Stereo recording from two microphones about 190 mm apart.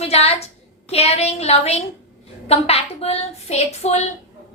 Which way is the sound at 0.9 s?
35° left (ahead or behind).